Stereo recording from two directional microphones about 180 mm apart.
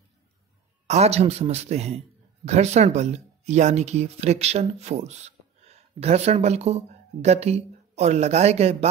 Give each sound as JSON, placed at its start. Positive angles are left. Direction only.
{"t": 0.8, "sound": "speech", "side_deg": -35}